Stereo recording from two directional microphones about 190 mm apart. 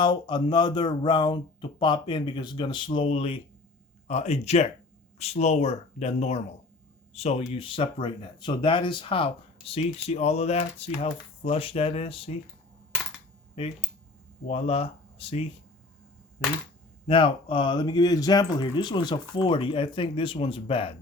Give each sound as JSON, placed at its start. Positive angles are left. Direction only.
{"t": 0.0, "sound": "speech", "side_deg": 25}
{"t": 13.6, "sound": "speech", "side_deg": 30}
{"t": 17.1, "sound": "speech", "side_deg": 25}